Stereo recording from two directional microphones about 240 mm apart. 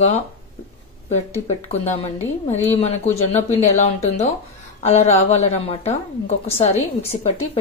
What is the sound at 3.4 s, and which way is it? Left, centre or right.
A woman's voice, left.